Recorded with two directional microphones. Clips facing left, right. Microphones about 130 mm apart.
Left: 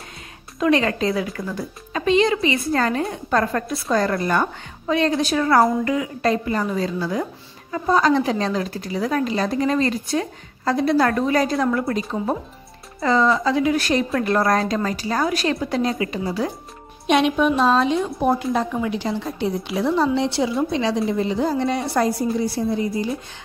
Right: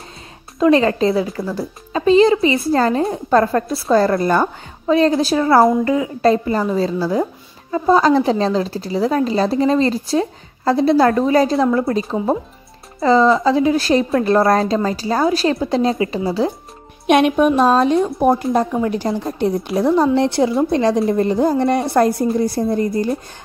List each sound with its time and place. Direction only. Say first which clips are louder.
0.6 s a woman's voice: right 5 dB; 35° right (ahead or behind)
17.0 s a woman's voice: right 4 dB; 55° right (ahead or behind)